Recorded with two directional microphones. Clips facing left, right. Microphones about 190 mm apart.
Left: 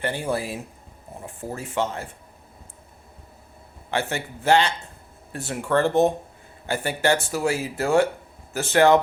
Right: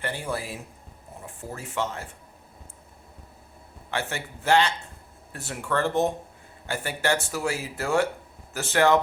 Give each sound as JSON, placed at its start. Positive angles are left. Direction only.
{"t": 0.0, "sound": "speech", "side_deg": 25}
{"t": 3.9, "sound": "speech", "side_deg": 25}